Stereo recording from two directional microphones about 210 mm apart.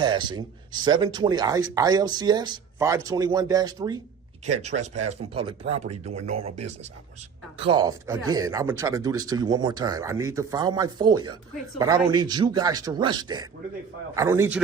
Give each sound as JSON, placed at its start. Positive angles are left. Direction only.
{"t": 0.0, "sound": "speech", "side_deg": -20}
{"t": 4.4, "sound": "speech", "side_deg": -30}